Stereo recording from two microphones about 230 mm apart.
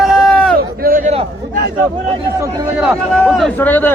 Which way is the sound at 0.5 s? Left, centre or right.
Right.